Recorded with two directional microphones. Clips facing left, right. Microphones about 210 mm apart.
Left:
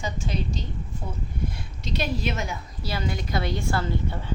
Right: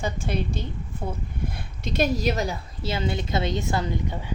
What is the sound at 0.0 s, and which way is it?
Speech, 55° right (ahead or behind).